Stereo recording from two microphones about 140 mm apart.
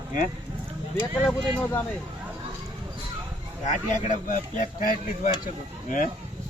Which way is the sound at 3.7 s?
60° left (ahead or behind).